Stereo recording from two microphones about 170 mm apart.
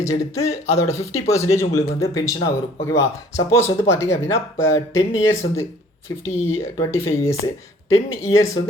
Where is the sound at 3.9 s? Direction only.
15° left (ahead or behind).